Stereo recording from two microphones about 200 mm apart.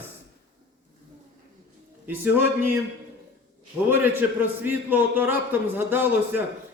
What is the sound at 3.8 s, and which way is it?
A man's voice, 10° right (ahead or behind).